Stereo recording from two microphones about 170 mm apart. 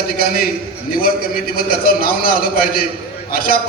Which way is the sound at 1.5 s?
60° left (ahead or behind).